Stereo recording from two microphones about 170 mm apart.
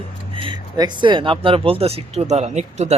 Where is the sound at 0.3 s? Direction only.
30° right (ahead or behind).